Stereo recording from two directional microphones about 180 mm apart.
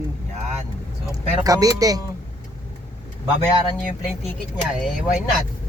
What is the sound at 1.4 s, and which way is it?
Speech, 20° right (ahead or behind).